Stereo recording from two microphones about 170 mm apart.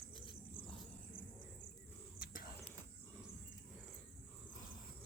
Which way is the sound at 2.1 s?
55° left (ahead or behind).